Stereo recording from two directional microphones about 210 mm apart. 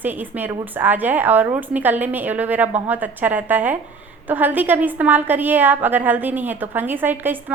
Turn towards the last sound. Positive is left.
turn(degrees=-10)  # may be behind; listen again after turning